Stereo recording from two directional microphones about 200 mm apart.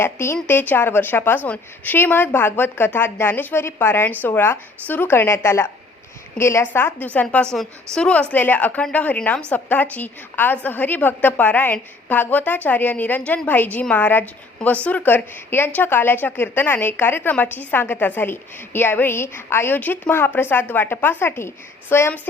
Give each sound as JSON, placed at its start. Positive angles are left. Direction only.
{"t": 0.0, "sound": "a woman's voice", "side_deg": 10}